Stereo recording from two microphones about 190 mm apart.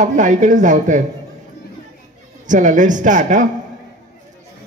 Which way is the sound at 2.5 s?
40° right (ahead or behind).